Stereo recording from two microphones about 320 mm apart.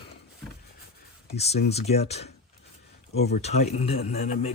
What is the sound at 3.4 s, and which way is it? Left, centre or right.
Speech, centre.